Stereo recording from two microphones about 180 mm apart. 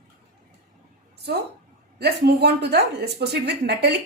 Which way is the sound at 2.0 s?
65° right (ahead or behind).